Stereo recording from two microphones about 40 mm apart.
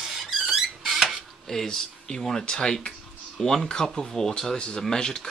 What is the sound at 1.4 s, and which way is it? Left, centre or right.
Speech, centre.